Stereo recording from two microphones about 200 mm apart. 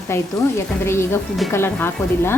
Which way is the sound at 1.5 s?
10° left (ahead or behind).